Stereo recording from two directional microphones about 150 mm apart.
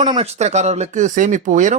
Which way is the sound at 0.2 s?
45° right (ahead or behind).